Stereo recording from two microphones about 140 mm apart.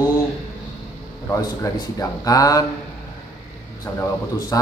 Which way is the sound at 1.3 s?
25° left (ahead or behind).